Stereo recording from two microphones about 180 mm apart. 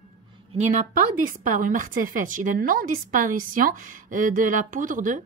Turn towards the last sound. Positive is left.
turn(degrees=-45)  # may be behind; listen again after turning